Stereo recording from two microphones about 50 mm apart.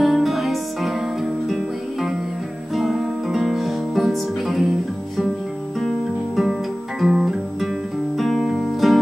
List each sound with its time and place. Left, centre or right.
0.0 s music: centre
5.8 s music: centre
7.0 s guitar: centre
8.2 s music: centre